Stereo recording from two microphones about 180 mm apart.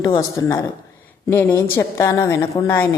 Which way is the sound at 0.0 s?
20° left (ahead or behind).